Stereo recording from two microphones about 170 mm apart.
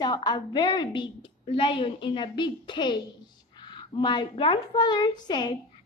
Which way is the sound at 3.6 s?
25° left (ahead or behind).